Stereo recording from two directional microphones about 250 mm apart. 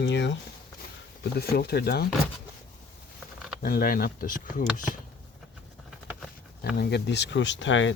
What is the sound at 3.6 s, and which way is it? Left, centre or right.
Speech, left.